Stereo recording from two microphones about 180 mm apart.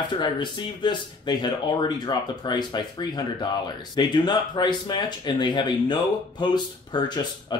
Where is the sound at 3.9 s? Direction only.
25° left (ahead or behind).